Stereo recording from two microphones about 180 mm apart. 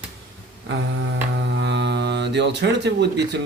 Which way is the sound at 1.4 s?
80° right.